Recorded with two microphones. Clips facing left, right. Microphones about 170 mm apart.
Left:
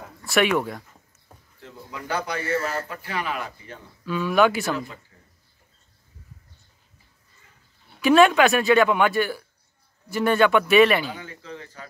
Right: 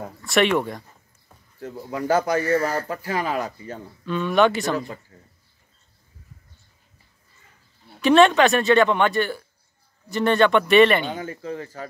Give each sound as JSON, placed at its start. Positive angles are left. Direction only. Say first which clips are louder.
{"t": 0.2, "sound": "speech", "louder": "right 1 dB", "side_deg": 0}
{"t": 2.0, "sound": "speech", "louder": "right 7 dB", "side_deg": -45}
{"t": 4.0, "sound": "speech", "louder": "right 1 dB", "side_deg": 5}
{"t": 5.1, "sound": "a sound", "louder": "right 6 dB", "side_deg": -40}
{"t": 8.0, "sound": "speech", "louder": "right 1 dB", "side_deg": 5}
{"t": 11.1, "sound": "speech", "louder": "right 8 dB", "side_deg": -45}